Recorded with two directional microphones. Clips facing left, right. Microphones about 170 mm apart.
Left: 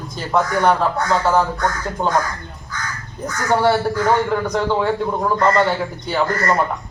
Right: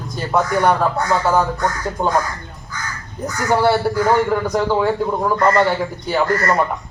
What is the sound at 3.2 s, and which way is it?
A man's voice, 10° right (ahead or behind).